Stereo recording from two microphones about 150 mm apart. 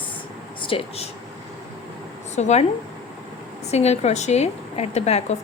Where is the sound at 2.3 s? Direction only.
50° left (ahead or behind).